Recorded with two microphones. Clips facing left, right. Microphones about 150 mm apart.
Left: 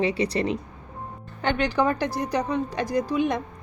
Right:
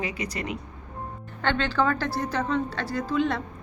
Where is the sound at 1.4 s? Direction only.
15° left (ahead or behind).